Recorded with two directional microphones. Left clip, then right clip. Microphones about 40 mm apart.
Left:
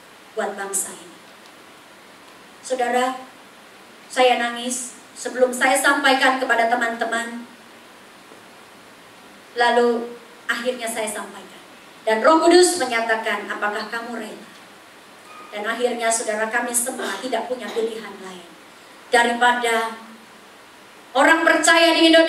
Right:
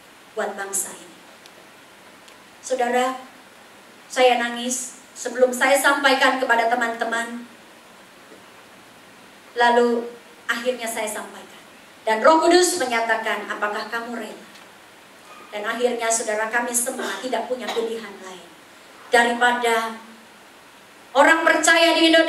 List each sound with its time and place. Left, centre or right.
0.4 s a woman's voice: centre
2.7 s a woman's voice: centre
9.6 s a woman's voice: centre
15.5 s a woman's voice: centre
19.0 s a woman's voice: centre
21.1 s a woman's voice: centre